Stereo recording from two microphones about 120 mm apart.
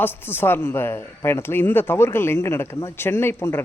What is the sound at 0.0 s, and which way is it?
Speech, 20° left (ahead or behind).